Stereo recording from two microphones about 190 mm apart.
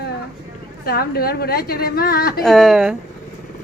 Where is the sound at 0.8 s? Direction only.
55° left (ahead or behind).